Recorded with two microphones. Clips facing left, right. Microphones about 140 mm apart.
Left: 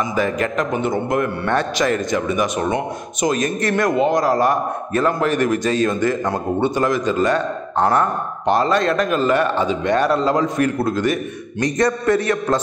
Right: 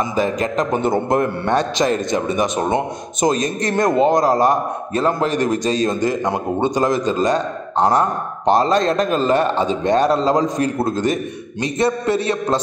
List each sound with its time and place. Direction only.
0.1 s a man's voice: 25° right (ahead or behind)
0.7 s a man's voice: 35° right (ahead or behind); by 8.1 s 15° right (ahead or behind)
8.5 s a man's voice: 30° right (ahead or behind)